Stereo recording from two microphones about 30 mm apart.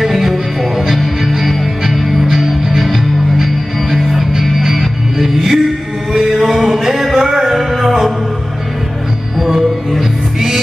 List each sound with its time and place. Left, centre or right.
0.0 s music: centre
6.1 s chant: centre
6.7 s music: centre
9.4 s music: centre